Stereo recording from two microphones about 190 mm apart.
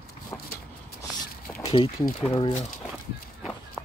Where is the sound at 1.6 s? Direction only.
25° left (ahead or behind).